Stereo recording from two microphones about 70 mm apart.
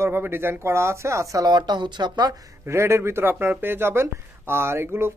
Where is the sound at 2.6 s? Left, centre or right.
Right.